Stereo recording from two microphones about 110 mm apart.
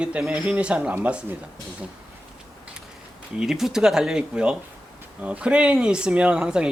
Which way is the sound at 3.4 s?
5° right (ahead or behind).